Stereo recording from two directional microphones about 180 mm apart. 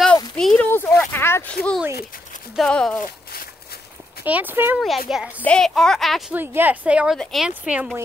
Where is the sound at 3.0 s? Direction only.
50° left (ahead or behind).